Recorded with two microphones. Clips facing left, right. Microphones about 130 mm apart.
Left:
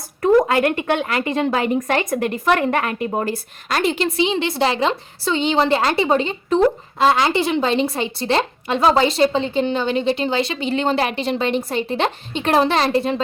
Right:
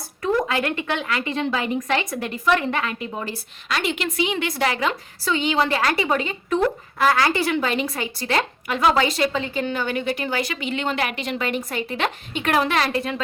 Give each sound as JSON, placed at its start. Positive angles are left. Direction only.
{"t": 0.2, "sound": "a woman's voice", "side_deg": 40}